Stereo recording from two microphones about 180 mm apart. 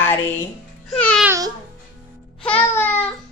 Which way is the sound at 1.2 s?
15° right (ahead or behind).